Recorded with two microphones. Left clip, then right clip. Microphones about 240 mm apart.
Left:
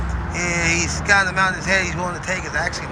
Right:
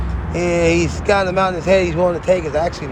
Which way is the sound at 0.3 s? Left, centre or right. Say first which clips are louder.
Right 5 dB; right.